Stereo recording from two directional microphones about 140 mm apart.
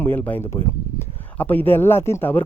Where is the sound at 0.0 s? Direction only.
15° left (ahead or behind).